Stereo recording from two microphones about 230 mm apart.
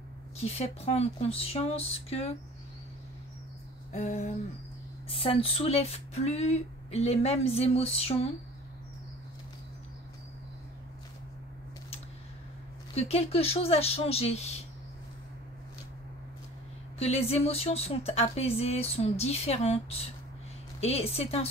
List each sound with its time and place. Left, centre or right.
0.4 s speech: left
3.9 s a sound: left
5.0 s speech: left
12.9 s speech: left
17.0 s speech: left